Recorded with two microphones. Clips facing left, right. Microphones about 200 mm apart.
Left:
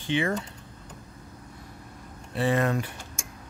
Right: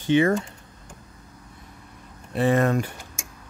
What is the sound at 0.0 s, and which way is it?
Speech, 45° right (ahead or behind).